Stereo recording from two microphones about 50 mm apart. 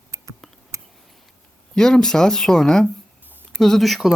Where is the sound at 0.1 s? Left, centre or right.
Right.